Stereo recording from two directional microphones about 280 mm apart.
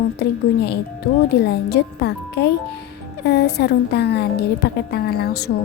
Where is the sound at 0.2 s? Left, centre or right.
Left.